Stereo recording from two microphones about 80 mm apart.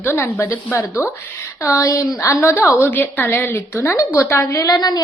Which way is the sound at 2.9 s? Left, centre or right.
Left.